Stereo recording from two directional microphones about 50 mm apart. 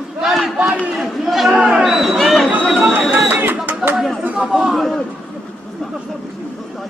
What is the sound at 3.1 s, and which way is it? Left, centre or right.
Speech, right.